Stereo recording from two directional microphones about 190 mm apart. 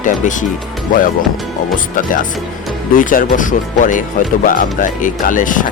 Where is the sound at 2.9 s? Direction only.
45° left (ahead or behind).